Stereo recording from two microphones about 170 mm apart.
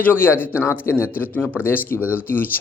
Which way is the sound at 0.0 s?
10° left (ahead or behind).